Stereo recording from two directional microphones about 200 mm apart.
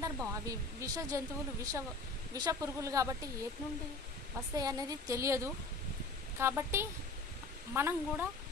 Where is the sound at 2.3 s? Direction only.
15° right (ahead or behind).